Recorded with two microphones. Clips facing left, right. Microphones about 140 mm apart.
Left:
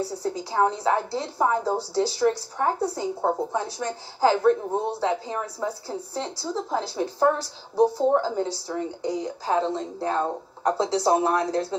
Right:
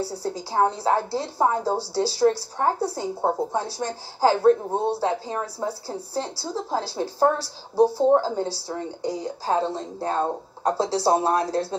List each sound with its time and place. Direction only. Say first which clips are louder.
0.4 s a woman's voice: right 1 dB; 30° right (ahead or behind)